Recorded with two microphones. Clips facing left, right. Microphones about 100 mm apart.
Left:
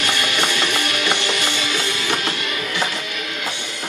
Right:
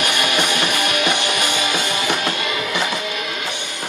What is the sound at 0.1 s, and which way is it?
Music, 15° right (ahead or behind).